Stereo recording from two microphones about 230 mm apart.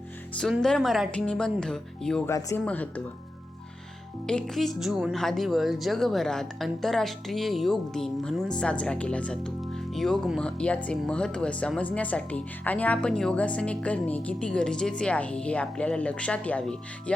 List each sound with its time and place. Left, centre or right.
0.3 s a woman's voice: centre
4.3 s a woman's voice: centre